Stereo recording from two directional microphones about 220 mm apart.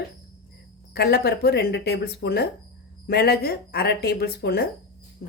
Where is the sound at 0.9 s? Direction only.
45° left (ahead or behind).